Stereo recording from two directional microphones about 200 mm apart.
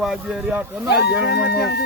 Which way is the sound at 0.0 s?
Centre (ahead or behind).